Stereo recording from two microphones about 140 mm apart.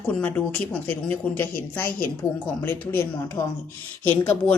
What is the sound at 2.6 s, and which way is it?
Speech, 15° left (ahead or behind).